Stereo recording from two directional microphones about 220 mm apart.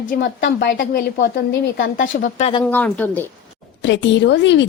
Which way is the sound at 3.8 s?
55° left (ahead or behind).